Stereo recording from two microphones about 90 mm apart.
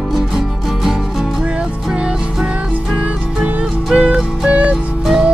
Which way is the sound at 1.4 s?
10° right (ahead or behind).